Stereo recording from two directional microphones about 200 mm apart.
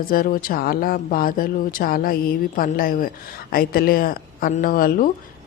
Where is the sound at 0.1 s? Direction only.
45° left (ahead or behind).